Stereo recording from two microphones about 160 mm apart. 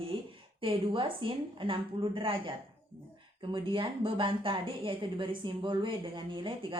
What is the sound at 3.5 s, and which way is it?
Speech, 30° right (ahead or behind).